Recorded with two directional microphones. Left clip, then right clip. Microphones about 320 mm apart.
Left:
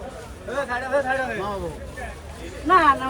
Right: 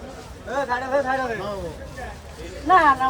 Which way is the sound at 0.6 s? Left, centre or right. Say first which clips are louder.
Even; right.